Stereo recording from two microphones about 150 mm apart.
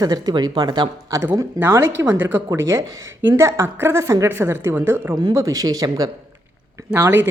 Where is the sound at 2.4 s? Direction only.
25° right (ahead or behind).